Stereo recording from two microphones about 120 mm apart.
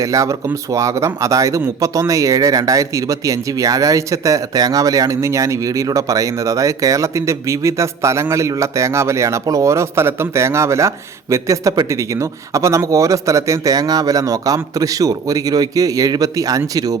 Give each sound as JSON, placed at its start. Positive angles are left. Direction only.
{"t": 0.0, "sound": "speech", "side_deg": -25}